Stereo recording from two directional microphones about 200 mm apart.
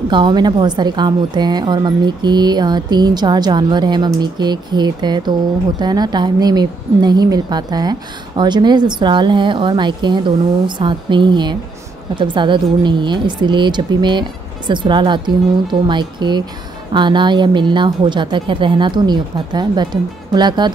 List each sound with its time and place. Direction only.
0.1 s a woman's voice: 20° right (ahead or behind)